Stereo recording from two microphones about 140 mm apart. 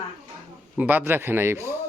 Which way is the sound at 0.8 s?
10° right (ahead or behind).